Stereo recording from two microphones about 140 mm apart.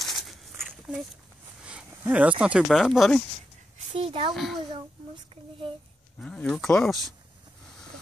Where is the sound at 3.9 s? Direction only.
40° right (ahead or behind).